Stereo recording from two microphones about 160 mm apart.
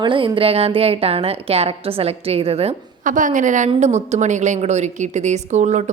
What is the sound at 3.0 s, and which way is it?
A woman's voice, 55° right (ahead or behind).